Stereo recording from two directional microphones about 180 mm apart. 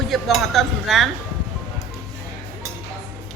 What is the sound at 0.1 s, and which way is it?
Speech, centre (ahead or behind).